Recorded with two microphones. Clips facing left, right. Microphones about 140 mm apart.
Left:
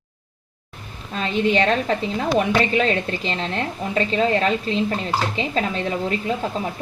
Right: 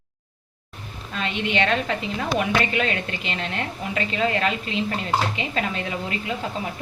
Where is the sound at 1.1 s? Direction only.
35° left (ahead or behind).